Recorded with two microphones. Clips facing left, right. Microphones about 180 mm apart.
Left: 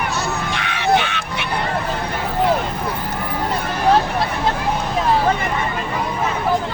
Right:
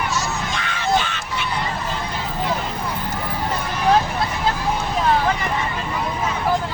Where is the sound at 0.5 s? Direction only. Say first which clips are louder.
Left 3 dB; 65° left (ahead or behind).